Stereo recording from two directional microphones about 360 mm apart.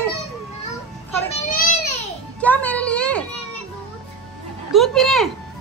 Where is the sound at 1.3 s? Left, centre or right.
Left.